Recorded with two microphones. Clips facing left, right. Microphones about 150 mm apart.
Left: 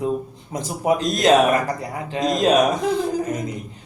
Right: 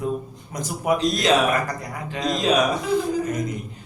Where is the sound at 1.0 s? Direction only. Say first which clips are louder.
Left 5 dB; 45° left (ahead or behind).